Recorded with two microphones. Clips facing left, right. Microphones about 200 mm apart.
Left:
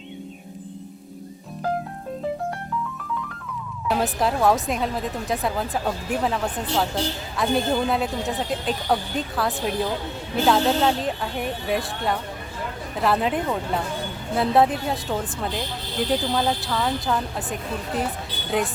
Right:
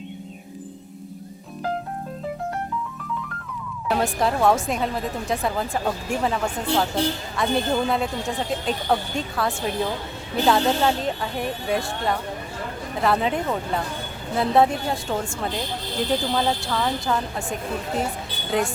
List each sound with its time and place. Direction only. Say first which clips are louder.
3.8 s a woman's voice: even; centre (ahead or behind)